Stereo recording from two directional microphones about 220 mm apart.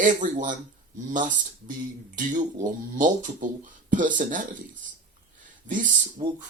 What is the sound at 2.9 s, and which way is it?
Speech, 35° right (ahead or behind).